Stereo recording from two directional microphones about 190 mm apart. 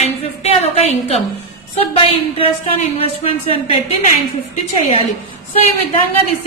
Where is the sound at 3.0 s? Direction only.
30° left (ahead or behind).